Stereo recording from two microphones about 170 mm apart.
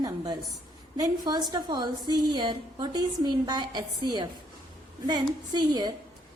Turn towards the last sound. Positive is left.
turn(degrees=-25)  # may be behind; listen again after turning